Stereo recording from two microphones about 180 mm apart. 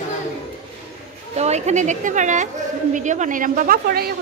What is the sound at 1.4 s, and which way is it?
A woman's voice, 40° right (ahead or behind).